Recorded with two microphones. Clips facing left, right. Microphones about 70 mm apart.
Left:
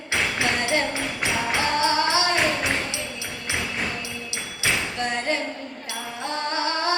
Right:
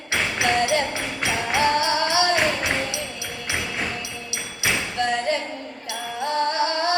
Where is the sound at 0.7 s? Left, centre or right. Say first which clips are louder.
Right 1 dB; left.